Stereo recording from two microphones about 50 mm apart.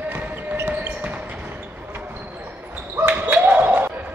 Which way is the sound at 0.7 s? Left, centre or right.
Right.